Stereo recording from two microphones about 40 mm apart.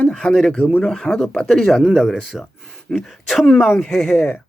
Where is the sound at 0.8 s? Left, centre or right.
Centre.